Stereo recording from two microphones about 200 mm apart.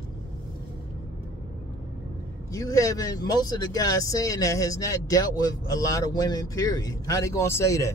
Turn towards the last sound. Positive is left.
turn(degrees=15)  # may be behind; listen again after turning